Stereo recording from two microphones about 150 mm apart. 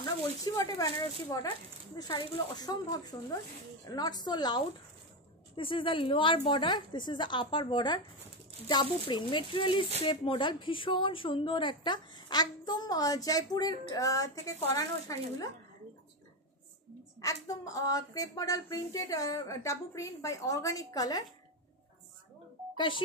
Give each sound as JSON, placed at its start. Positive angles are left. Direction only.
{"t": 0.0, "sound": "a woman's voice", "side_deg": 25}
{"t": 17.2, "sound": "speech", "side_deg": 20}
{"t": 22.8, "sound": "a woman's voice", "side_deg": 35}